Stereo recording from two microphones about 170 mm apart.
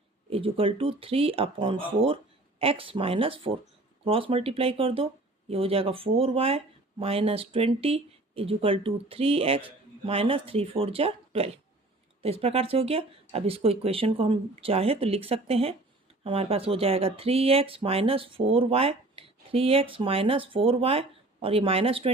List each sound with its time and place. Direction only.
0.3 s speech: 30° right (ahead or behind)